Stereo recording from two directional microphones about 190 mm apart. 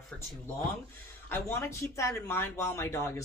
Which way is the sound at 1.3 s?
15° left (ahead or behind).